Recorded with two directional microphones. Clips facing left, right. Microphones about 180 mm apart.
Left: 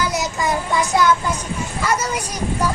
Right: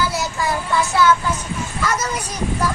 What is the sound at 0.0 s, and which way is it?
Child singing, 20° left (ahead or behind).